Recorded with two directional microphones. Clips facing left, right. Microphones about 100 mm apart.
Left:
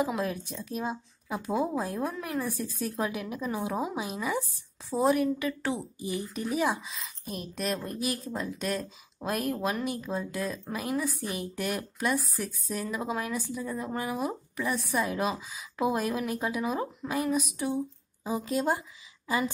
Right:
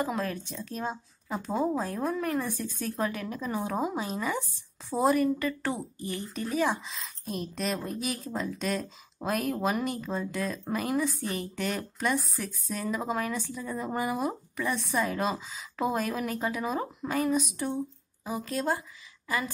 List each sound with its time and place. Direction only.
0.0 s a woman's voice: 10° left (ahead or behind)
6.9 s a woman's voice: centre (ahead or behind)
18.2 s a woman's voice: 15° left (ahead or behind)